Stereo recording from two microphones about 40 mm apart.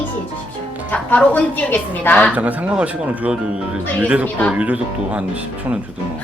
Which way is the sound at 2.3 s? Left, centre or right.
Right.